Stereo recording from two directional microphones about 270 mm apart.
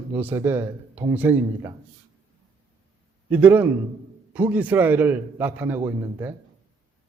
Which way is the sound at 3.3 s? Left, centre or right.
Centre.